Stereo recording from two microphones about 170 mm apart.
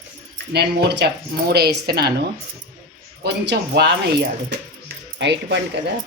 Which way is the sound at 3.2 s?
80° right.